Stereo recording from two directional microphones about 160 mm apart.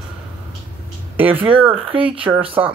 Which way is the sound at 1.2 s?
10° right (ahead or behind).